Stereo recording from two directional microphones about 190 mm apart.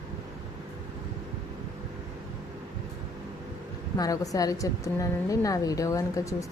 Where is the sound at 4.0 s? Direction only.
20° left (ahead or behind).